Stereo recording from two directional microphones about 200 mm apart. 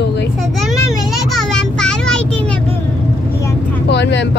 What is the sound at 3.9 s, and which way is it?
Vehicle, 60° left (ahead or behind).